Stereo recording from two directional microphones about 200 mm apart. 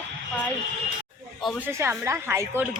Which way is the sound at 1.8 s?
10° right (ahead or behind).